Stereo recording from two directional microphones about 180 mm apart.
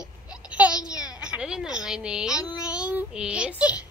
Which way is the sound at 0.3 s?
5° right (ahead or behind).